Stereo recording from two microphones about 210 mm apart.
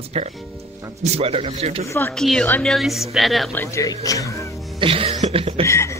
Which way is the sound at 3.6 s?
15° left (ahead or behind).